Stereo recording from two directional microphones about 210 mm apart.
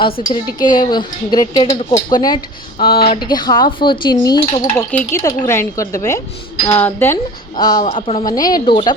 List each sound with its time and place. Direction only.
0.3 s speech: 20° left (ahead or behind)
2.7 s speech: 45° left (ahead or behind)
3.0 s speech: 20° left (ahead or behind)